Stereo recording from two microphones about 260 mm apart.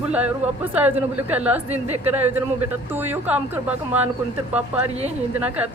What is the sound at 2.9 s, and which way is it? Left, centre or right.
Speech, centre.